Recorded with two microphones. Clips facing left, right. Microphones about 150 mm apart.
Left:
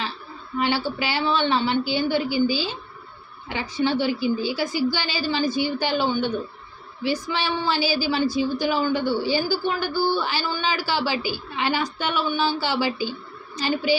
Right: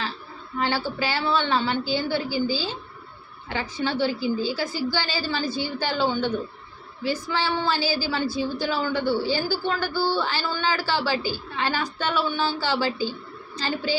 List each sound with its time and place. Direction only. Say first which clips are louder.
0.6 s a woman's voice: left 1 dB; 15° left (ahead or behind)